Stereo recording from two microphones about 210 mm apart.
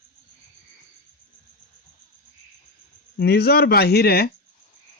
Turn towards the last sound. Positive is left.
turn(degrees=50)  # may be behind; listen again after turning